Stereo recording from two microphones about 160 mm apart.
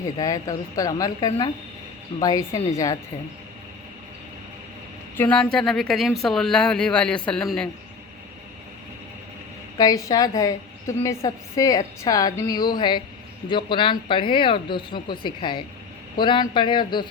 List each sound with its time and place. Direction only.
0.2 s a woman's voice: 20° left (ahead or behind)
5.1 s speech: 10° left (ahead or behind)
9.7 s a woman's voice: 25° left (ahead or behind)